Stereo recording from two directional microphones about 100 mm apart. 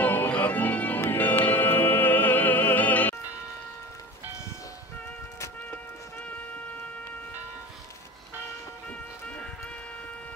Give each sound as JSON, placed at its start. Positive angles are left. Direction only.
{"t": 0.0, "sound": "music", "side_deg": 20}
{"t": 8.8, "sound": "music", "side_deg": 15}